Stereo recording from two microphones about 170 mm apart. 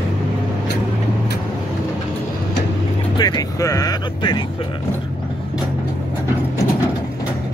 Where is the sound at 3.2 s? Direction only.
25° left (ahead or behind).